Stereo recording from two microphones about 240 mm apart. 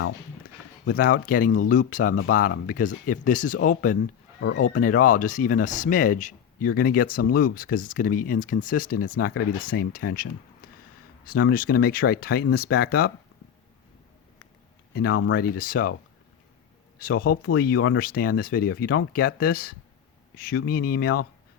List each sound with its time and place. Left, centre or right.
1.2 s speech: left
4.4 s speech: left
4.7 s speech: left
14.9 s speech: left
17.0 s speech: left